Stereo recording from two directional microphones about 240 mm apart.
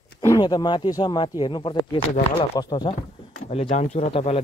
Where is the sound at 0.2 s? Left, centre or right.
Centre.